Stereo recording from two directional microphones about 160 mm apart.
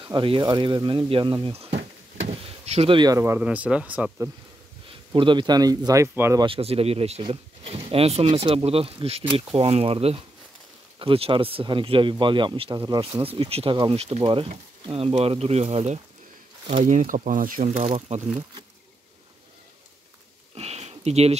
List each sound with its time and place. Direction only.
0.0 s speech: 30° right (ahead or behind)
3.0 s speech: 20° right (ahead or behind)
5.1 s speech: 30° right (ahead or behind)
6.4 s speech: 35° right (ahead or behind)
16.8 s speech: 55° right (ahead or behind)
18.1 s speech: 45° right (ahead or behind)
20.5 s a sound: 40° right (ahead or behind)